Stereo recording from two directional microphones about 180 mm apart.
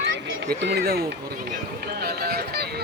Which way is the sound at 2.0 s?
60° right (ahead or behind).